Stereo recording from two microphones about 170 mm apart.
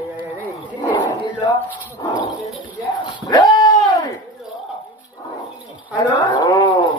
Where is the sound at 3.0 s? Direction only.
25° left (ahead or behind).